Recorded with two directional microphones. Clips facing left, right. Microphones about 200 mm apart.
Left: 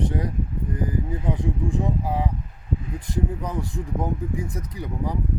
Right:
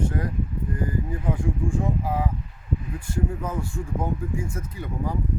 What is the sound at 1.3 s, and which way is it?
Speech, 20° left (ahead or behind).